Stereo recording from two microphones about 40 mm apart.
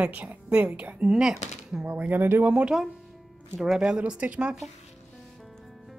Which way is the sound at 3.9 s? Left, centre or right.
Right.